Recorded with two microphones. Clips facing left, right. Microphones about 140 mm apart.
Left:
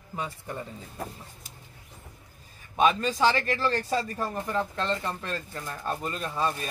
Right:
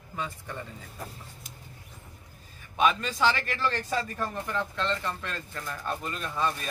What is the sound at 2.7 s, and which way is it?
A man's voice, 40° left (ahead or behind).